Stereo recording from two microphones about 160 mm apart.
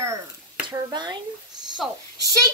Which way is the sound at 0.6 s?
25° right (ahead or behind).